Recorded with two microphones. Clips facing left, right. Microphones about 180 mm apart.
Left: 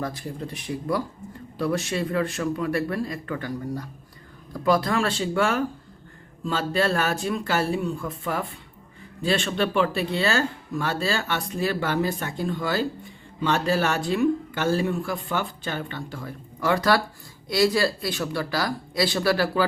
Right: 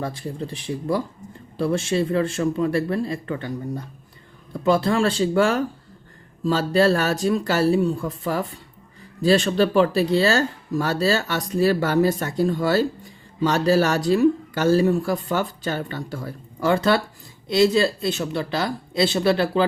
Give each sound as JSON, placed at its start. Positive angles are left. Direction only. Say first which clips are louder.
{"t": 0.0, "sound": "speech", "louder": "right 2 dB", "side_deg": -30}